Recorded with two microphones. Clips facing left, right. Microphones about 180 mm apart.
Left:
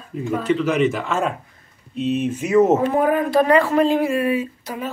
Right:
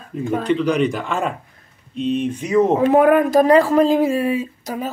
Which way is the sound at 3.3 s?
35° right (ahead or behind).